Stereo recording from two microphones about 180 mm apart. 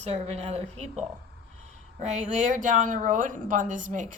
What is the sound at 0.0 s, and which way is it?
Speech, 35° right (ahead or behind).